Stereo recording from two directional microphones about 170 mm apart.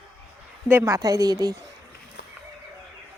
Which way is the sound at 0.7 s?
15° right (ahead or behind).